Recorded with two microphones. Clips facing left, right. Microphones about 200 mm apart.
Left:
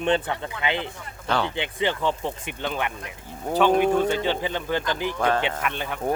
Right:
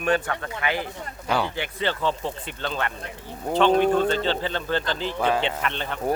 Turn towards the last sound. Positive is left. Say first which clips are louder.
# even
turn(degrees=10)  # may be behind; listen again after turning